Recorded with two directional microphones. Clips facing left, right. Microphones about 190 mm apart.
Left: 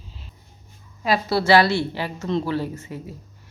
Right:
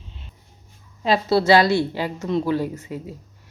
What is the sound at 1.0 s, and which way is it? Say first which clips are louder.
A woman's voice: right 2 dB; 20° right (ahead or behind).